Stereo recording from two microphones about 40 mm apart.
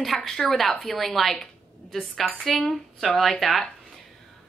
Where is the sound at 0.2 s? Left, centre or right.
Centre.